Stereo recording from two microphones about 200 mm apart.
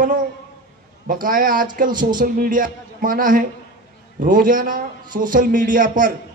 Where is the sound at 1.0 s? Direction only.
45° right (ahead or behind).